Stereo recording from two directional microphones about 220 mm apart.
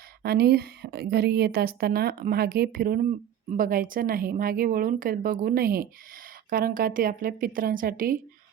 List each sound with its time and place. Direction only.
0.2 s a woman's voice: 45° right (ahead or behind)